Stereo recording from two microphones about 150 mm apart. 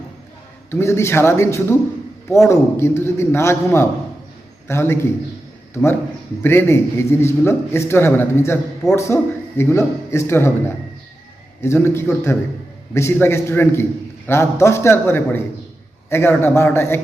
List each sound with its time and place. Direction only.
0.7 s a man's voice: 15° left (ahead or behind)